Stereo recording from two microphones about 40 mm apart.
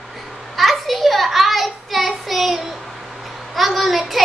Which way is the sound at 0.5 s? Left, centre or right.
Centre.